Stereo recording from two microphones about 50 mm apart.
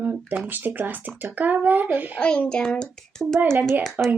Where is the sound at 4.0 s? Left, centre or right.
Right.